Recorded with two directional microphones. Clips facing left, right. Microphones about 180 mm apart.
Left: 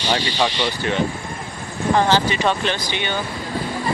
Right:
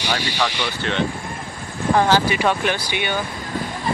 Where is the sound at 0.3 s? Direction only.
15° left (ahead or behind).